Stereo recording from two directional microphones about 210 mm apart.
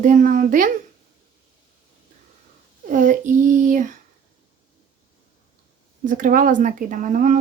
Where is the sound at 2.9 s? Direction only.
40° right (ahead or behind).